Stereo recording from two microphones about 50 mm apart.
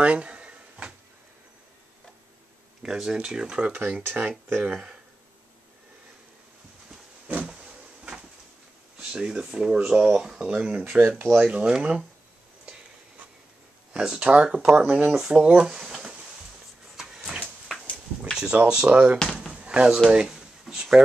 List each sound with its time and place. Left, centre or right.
0.0 s a sound: right
2.8 s speech: centre
4.0 s speech: right
4.6 s speech: centre
7.4 s a sound: centre
8.9 s speech: centre
10.8 s speech: right
11.3 s speech: centre
13.9 s speech: centre
15.6 s a sound: centre
18.3 s speech: centre
19.5 s door: right
20.1 s a sound: centre